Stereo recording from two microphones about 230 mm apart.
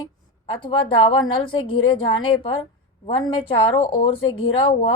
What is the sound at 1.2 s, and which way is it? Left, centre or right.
A woman's voice, left.